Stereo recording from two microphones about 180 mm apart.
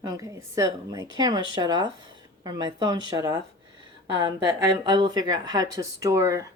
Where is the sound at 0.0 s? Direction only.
20° right (ahead or behind).